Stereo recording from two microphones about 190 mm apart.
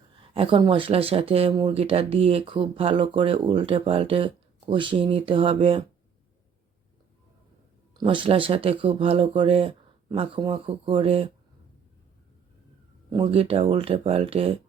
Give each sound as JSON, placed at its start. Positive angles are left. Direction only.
{"t": 0.2, "sound": "speech", "side_deg": -30}
{"t": 7.9, "sound": "speech", "side_deg": -25}
{"t": 13.1, "sound": "speech", "side_deg": -30}